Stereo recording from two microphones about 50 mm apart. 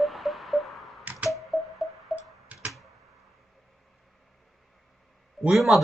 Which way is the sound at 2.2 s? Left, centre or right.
Right.